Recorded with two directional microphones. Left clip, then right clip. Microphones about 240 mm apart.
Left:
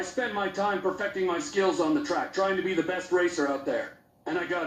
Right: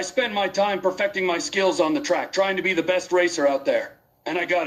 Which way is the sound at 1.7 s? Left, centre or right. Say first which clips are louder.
Right 5 dB; right.